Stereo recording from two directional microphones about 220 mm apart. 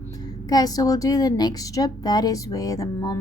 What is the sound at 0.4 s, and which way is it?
Speech, 15° left (ahead or behind).